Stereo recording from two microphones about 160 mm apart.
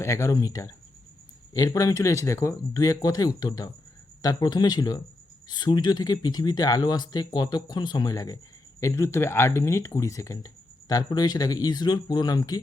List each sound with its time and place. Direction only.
0.0 s speech: 20° left (ahead or behind)